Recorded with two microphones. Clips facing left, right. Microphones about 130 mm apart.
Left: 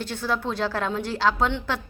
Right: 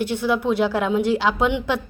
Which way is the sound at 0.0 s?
15° right (ahead or behind).